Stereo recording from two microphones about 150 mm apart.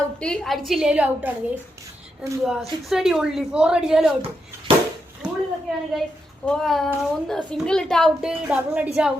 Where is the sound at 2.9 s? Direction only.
Centre (ahead or behind).